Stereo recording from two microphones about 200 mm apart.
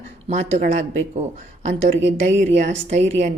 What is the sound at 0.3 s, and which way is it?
Speech, 35° right (ahead or behind).